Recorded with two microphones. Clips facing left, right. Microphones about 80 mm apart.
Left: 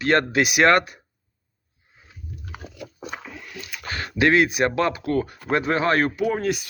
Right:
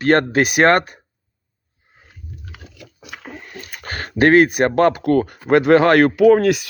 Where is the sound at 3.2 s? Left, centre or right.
Right.